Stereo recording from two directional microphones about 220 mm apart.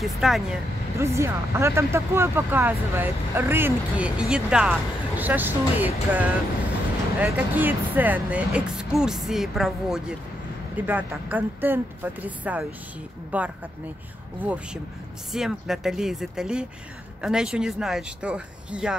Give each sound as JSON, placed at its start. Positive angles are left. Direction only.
{"t": 0.0, "sound": "speech", "side_deg": 0}